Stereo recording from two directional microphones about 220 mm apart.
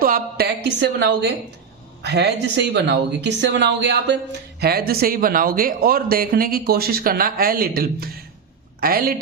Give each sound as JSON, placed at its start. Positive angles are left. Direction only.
{"t": 0.0, "sound": "a woman's voice", "side_deg": -45}